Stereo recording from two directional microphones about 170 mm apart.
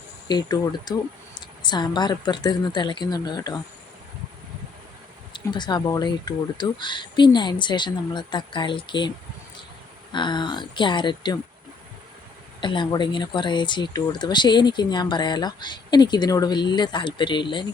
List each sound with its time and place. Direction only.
0.3 s speech: 25° left (ahead or behind)
5.3 s speech: 25° left (ahead or behind)
12.5 s speech: 30° left (ahead or behind)